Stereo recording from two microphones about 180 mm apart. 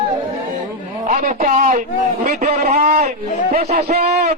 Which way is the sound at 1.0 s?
45° right (ahead or behind).